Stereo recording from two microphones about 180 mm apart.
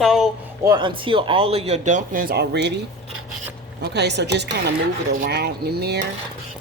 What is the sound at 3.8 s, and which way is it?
Speech, 70° right (ahead or behind).